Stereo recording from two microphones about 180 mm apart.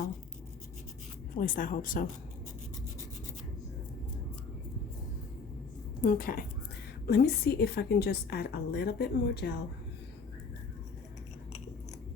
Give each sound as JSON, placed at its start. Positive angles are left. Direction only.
{"t": 1.4, "sound": "speech", "side_deg": 50}
{"t": 6.0, "sound": "a woman's voice", "side_deg": 50}
{"t": 7.1, "sound": "a woman's voice", "side_deg": 60}